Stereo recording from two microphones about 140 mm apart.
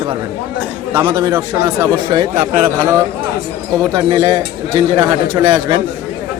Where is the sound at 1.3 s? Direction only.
15° right (ahead or behind).